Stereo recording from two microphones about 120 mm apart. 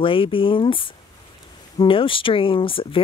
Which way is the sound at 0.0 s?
45° left (ahead or behind).